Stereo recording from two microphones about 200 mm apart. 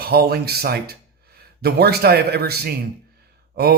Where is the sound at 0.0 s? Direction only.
50° right (ahead or behind).